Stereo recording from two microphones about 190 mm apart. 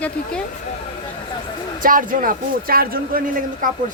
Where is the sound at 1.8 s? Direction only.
45° right (ahead or behind).